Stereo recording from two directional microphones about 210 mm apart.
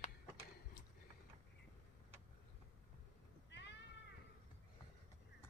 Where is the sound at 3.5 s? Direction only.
55° left (ahead or behind).